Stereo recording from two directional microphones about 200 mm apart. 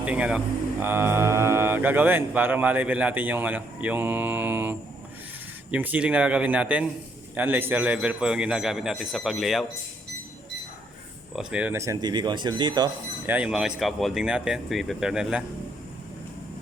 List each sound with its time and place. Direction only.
0.0 s a man's voice: 5° right (ahead or behind)
11.3 s speech: 5° right (ahead or behind); by 12.9 s 20° right (ahead or behind)
13.2 s a man's voice: 5° right (ahead or behind)